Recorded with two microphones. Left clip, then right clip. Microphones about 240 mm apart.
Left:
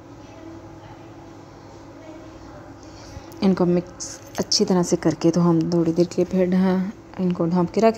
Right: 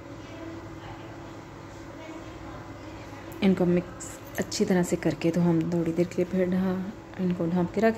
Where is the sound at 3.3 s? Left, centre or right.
Left.